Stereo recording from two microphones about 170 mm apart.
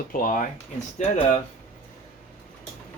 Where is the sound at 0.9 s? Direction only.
45° left (ahead or behind).